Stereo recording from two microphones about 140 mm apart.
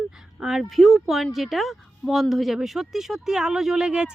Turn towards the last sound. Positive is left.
turn(degrees=-5)  # may be behind; listen again after turning